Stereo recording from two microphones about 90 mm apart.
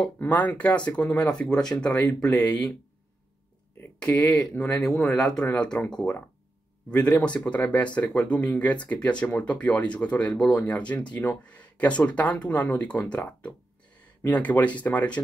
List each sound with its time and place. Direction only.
0.0 s speech: 15° left (ahead or behind)
4.2 s speech: 15° left (ahead or behind)